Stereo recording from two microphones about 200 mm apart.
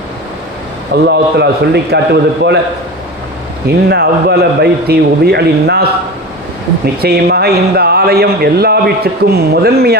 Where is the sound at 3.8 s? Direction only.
55° right (ahead or behind).